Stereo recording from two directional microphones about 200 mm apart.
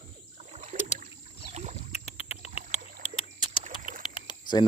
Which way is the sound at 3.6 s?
40° right (ahead or behind).